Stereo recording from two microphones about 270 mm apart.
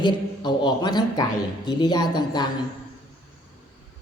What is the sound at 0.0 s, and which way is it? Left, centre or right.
A man's voice, centre.